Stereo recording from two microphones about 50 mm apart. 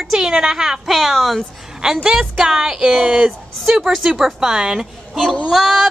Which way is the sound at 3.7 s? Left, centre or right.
Centre.